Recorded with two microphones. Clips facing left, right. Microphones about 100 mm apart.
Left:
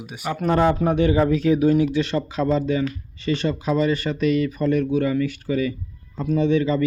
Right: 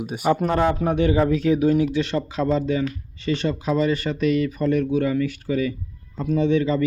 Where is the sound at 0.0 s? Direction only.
50° right (ahead or behind).